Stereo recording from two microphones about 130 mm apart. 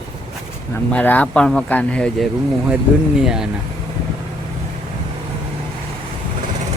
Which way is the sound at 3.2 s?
5° right (ahead or behind).